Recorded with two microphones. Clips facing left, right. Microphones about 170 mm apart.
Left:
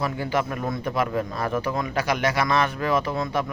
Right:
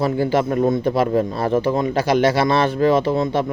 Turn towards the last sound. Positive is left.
turn(degrees=-30)  # may be behind; listen again after turning